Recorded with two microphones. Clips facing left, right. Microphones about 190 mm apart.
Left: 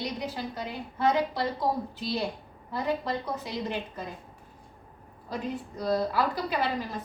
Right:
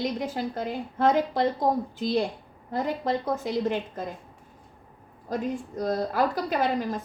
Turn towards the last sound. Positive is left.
turn(degrees=-45)  # may be behind; listen again after turning